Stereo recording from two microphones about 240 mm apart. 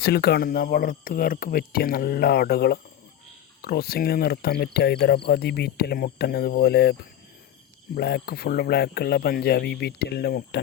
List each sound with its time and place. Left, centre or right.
0.0 s speech: left
7.9 s speech: left